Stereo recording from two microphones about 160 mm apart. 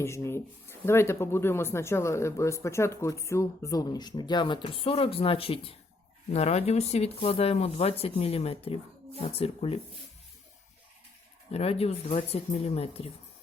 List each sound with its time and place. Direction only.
0.0 s speech: 15° left (ahead or behind); by 9.8 s 35° left (ahead or behind)
11.5 s speech: 40° left (ahead or behind)